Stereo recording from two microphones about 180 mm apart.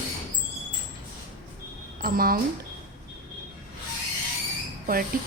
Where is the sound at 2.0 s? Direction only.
55° right (ahead or behind).